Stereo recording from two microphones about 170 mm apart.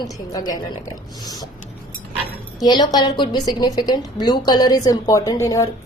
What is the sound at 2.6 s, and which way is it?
A woman's voice, 25° left (ahead or behind).